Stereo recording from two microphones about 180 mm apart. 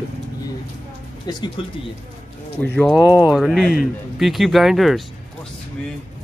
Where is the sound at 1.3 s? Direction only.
25° left (ahead or behind).